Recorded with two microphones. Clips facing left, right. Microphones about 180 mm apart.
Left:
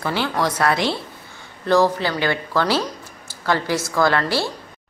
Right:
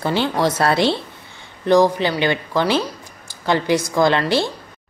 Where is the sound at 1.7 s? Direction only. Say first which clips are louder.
Right 3 dB; 15° right (ahead or behind).